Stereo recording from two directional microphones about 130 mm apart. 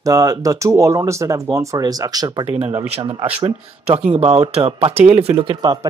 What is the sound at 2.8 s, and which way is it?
Speech, 50° right (ahead or behind).